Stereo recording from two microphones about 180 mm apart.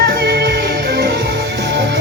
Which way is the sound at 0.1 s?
60° right (ahead or behind).